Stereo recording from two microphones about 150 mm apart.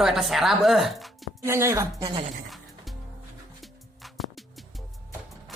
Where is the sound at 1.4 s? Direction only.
20° right (ahead or behind).